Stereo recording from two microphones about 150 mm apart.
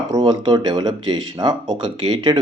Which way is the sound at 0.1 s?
25° right (ahead or behind).